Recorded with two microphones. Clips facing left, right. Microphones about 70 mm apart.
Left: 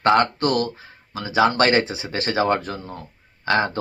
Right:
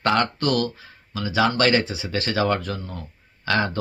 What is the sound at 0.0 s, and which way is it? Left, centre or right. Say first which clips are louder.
Speech: left 4 dB; left.